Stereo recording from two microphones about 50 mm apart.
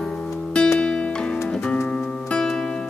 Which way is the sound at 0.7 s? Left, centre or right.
Left.